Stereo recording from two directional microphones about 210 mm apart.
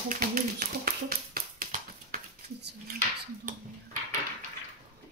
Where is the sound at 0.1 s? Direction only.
45° right (ahead or behind).